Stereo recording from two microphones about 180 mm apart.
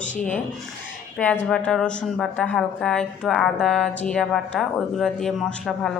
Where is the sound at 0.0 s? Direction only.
45° left (ahead or behind).